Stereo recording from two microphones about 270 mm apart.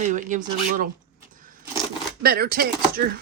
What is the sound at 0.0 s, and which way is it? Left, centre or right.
Speech, right.